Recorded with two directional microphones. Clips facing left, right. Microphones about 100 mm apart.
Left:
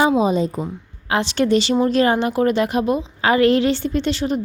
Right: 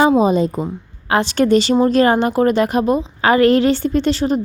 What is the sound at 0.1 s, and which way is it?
A woman's voice, 45° right (ahead or behind).